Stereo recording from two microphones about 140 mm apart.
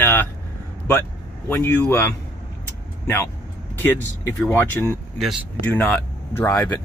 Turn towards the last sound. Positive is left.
turn(degrees=15)  # may be behind; listen again after turning